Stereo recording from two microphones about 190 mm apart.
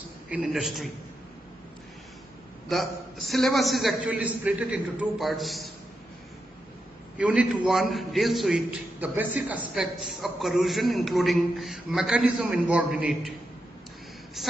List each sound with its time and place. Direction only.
0.3 s a man's voice: centre (ahead or behind)
2.7 s a man's voice: centre (ahead or behind)
7.2 s a man's voice: 5° right (ahead or behind)
14.4 s a sound: centre (ahead or behind)